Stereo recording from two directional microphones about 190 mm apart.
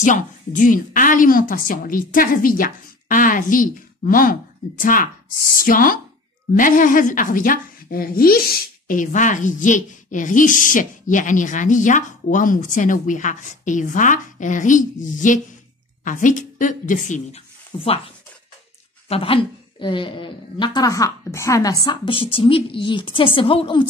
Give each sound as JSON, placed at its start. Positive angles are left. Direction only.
{"t": 0.0, "sound": "speech", "side_deg": 45}
{"t": 17.7, "sound": "a woman's voice", "side_deg": 30}